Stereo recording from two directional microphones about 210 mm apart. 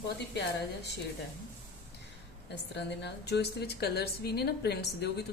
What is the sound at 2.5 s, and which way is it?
Speech, 55° left (ahead or behind).